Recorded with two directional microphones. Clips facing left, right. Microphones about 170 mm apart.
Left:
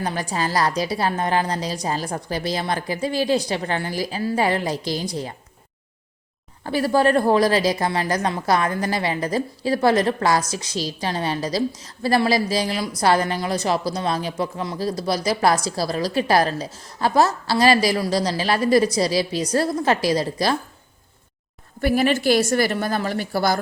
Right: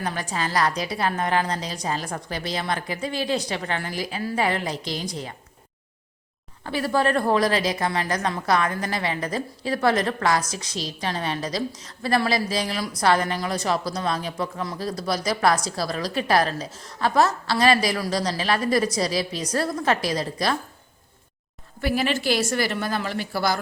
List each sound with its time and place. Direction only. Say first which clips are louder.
0.0 s a woman's voice: left 3 dB; 35° left (ahead or behind)
6.7 s a woman's voice: left 4 dB; 40° left (ahead or behind)
21.8 s a woman's voice: left 5 dB; 50° left (ahead or behind)